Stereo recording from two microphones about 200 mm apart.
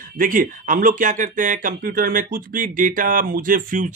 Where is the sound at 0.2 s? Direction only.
45° right (ahead or behind).